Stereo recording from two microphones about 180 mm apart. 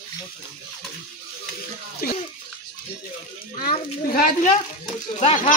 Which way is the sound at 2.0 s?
55° left (ahead or behind).